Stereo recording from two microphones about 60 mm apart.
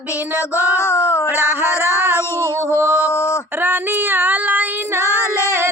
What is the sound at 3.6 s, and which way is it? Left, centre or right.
Female singing, right.